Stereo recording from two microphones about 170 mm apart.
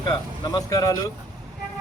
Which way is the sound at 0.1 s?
25° left (ahead or behind).